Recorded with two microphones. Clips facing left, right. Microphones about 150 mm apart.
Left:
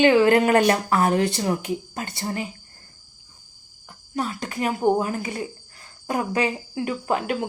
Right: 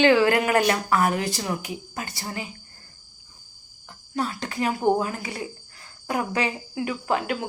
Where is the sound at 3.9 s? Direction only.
15° left (ahead or behind).